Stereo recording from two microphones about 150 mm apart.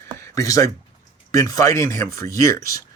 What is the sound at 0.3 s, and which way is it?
Speech, 20° left (ahead or behind).